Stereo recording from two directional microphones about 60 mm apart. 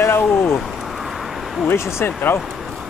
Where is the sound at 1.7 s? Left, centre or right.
Left.